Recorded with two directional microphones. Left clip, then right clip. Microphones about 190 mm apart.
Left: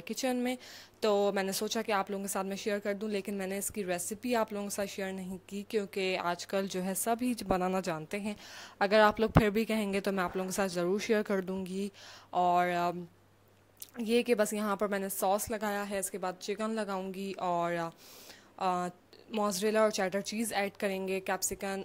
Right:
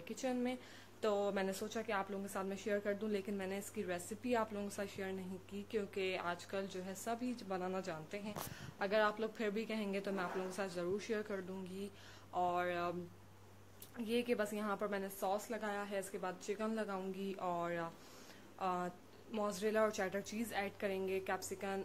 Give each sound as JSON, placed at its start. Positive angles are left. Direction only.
{"t": 0.1, "sound": "a woman's voice", "side_deg": 40}
{"t": 13.9, "sound": "a woman's voice", "side_deg": 45}